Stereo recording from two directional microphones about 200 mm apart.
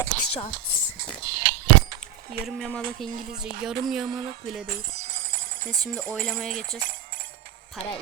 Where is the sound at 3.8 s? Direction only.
Centre (ahead or behind).